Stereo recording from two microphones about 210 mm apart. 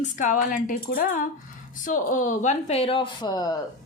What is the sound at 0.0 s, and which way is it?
A woman's voice, 35° left (ahead or behind).